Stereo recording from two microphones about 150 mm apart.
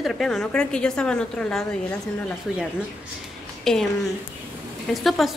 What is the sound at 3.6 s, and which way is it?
Speech, 5° left (ahead or behind).